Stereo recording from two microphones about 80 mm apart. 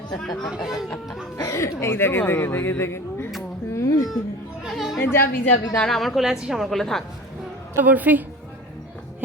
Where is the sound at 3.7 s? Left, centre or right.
Left.